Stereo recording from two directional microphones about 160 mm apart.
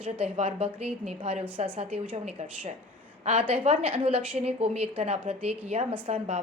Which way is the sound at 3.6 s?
35° right (ahead or behind).